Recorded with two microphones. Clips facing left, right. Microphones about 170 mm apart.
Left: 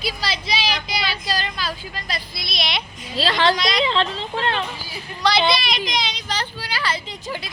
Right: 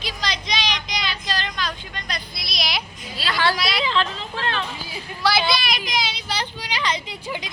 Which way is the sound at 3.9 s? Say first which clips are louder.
Left 2 dB; 30° left (ahead or behind).